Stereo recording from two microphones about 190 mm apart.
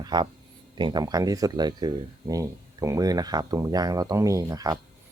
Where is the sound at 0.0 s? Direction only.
20° right (ahead or behind).